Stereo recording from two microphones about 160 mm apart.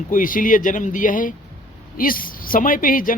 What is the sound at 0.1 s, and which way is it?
Speech, 55° left (ahead or behind).